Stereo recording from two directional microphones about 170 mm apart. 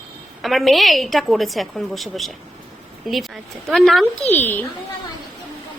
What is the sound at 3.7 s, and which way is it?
Speech, centre (ahead or behind).